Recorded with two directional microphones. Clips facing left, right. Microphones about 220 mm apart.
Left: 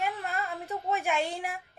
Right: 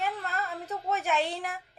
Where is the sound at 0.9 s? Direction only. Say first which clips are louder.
Right 1 dB; 10° left (ahead or behind).